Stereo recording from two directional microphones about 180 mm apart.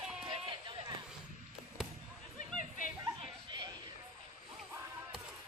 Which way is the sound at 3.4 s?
25° right (ahead or behind).